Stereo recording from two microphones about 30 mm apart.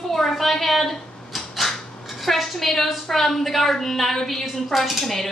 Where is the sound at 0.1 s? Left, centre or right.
Centre.